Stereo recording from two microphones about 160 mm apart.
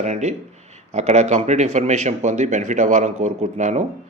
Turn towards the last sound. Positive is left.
turn(degrees=-50)  # may be behind; listen again after turning